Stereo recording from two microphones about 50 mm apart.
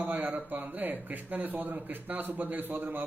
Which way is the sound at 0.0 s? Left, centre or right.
Right.